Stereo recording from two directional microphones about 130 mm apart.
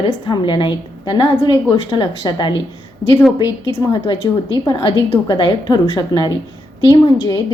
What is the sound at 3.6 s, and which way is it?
A woman's voice, 25° left (ahead or behind).